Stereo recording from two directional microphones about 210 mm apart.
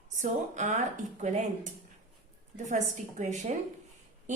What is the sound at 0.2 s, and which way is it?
Speech, 35° right (ahead or behind).